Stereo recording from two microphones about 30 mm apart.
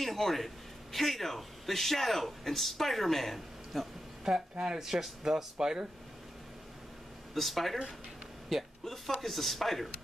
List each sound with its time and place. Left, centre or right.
0.0 s a man's voice: centre
4.2 s speech: right
7.3 s speech: centre
8.8 s speech: centre